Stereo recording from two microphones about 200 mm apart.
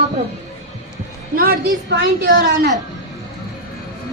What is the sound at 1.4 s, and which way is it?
Speech, 55° right (ahead or behind).